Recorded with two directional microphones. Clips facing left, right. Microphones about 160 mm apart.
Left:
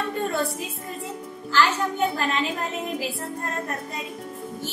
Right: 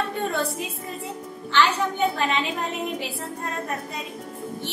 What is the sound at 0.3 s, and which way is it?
Speech, centre (ahead or behind).